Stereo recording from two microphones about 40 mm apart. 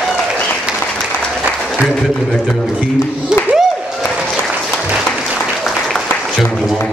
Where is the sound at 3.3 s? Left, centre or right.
Centre.